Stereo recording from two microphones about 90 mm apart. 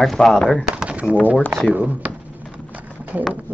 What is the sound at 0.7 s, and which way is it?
Pigeon, 10° right (ahead or behind).